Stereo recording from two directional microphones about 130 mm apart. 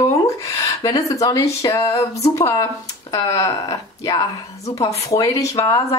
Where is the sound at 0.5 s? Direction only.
25° left (ahead or behind).